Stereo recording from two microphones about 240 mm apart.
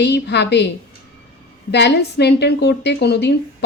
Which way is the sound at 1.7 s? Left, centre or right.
Left.